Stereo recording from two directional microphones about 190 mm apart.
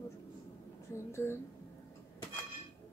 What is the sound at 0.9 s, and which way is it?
Speech, 15° left (ahead or behind).